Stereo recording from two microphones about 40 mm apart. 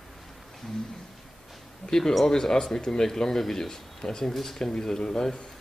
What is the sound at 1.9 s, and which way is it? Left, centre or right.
Speech, centre.